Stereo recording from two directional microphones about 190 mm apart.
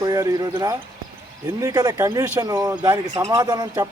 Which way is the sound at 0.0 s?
20° right (ahead or behind).